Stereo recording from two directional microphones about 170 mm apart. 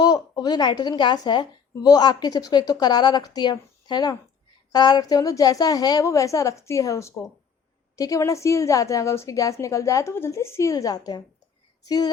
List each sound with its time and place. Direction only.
0.0 s a woman's voice: 25° left (ahead or behind)